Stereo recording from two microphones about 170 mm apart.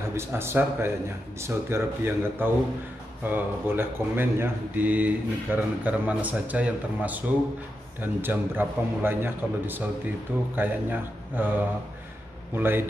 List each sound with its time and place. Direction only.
0.1 s speech: 15° right (ahead or behind)